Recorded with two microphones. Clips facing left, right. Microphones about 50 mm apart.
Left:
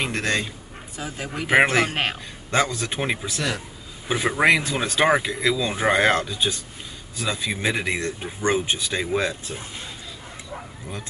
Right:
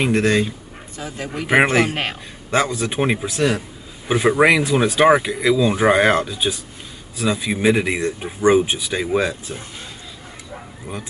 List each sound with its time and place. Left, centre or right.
0.0 s speech: centre
0.9 s speech: centre
1.5 s speech: centre